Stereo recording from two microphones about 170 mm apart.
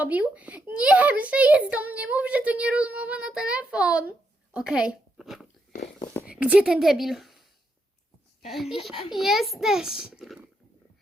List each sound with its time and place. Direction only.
0.0 s a child's voice: 10° right (ahead or behind)
8.4 s a child's voice: centre (ahead or behind)
8.9 s a child's voice: 30° left (ahead or behind)
9.1 s a child's voice: centre (ahead or behind)